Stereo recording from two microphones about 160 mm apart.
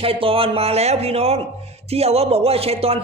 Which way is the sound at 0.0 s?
35° right (ahead or behind).